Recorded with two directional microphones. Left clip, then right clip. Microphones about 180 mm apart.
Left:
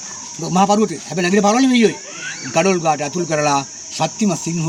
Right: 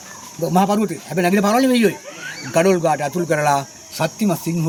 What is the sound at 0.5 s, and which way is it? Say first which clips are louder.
Speech: left 3 dB; 10° right (ahead or behind).